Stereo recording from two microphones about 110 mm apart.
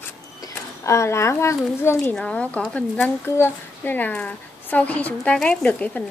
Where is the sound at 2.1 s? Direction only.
10° left (ahead or behind).